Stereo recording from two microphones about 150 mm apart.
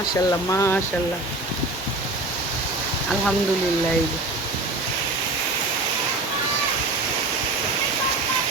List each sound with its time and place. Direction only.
0.3 s speech: 20° left (ahead or behind)